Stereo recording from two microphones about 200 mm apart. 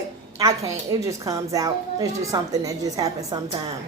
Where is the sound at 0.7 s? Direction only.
15° right (ahead or behind).